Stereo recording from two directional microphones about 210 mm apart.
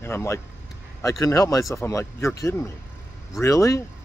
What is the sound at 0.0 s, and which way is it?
Speech, 10° left (ahead or behind).